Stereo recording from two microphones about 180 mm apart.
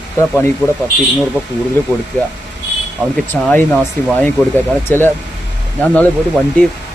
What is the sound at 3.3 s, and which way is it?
Speech, 10° left (ahead or behind).